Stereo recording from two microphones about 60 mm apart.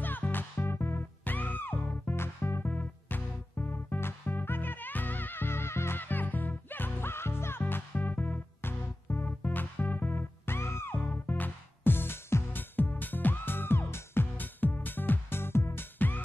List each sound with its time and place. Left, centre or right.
0.0 s music: left
2.7 s music: left
7.9 s music: left
11.0 s music: left
12.5 s music: left